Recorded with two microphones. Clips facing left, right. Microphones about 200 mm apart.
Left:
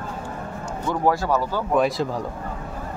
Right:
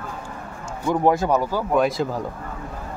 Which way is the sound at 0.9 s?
20° right (ahead or behind).